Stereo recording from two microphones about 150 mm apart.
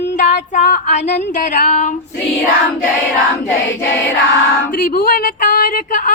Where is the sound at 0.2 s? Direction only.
55° left (ahead or behind).